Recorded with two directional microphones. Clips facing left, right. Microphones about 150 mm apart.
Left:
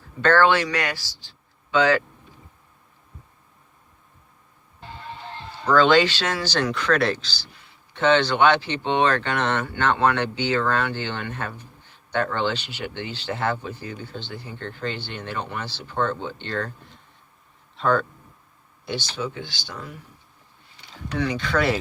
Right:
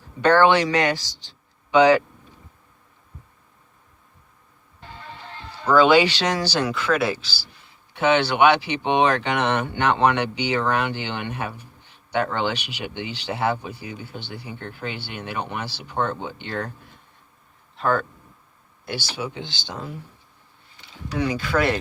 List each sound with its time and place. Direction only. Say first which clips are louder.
0.2 s speech: right 2 dB; 15° right (ahead or behind)
5.6 s speech: right 1 dB; 10° right (ahead or behind)
17.7 s speech: left 1 dB; centre (ahead or behind)
19.4 s speech: right 2 dB; 25° right (ahead or behind)
21.2 s speech: right 1 dB; 5° right (ahead or behind)